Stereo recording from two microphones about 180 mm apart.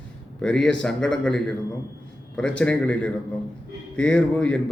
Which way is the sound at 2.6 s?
5° left (ahead or behind).